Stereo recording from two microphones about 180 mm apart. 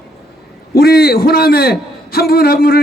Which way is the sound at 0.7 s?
60° left (ahead or behind).